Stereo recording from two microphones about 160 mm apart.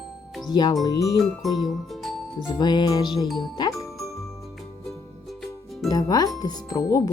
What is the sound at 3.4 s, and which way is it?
Jingle, 25° left (ahead or behind).